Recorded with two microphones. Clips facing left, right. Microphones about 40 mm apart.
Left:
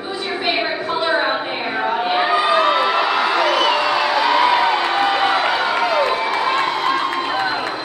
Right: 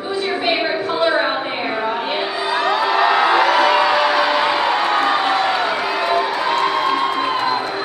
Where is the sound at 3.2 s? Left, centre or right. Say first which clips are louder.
Right 3 dB; right.